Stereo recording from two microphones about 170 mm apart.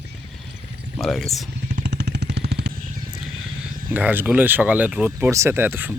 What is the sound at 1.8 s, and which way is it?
Vehicle, 75° right (ahead or behind).